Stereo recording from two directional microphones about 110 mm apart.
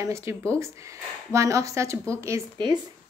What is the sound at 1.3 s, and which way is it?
Speech, 30° right (ahead or behind).